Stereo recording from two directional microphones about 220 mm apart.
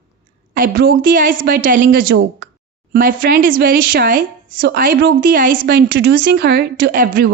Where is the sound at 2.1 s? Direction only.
50° right (ahead or behind).